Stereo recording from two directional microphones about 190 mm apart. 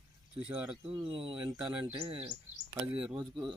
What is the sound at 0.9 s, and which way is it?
Speech, 30° right (ahead or behind).